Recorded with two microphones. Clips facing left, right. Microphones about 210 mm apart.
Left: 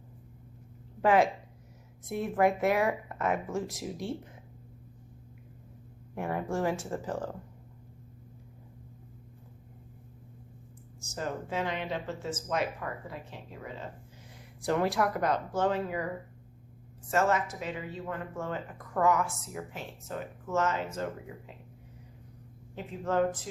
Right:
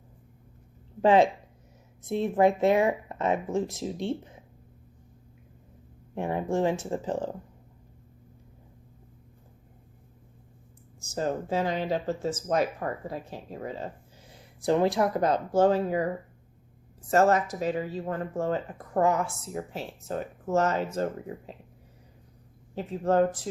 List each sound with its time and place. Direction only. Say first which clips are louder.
1.0 s speech: right 4 dB; 25° right (ahead or behind)
6.1 s speech: right 4 dB; 20° right (ahead or behind)
11.1 s speech: right 6 dB; 35° right (ahead or behind)
14.6 s speech: right 4 dB; 25° right (ahead or behind)
17.1 s speech: right 5 dB; 40° right (ahead or behind)
22.7 s speech: right 6 dB; 35° right (ahead or behind)